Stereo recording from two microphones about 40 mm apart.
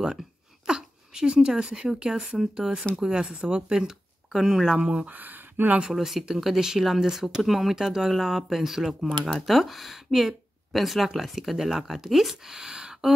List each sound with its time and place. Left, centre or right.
0.7 s speech: centre
4.3 s speech: centre
4.7 s speech: right
5.0 s speech: right
5.9 s speech: centre